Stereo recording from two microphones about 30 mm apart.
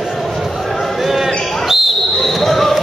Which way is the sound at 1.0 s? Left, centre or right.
Centre.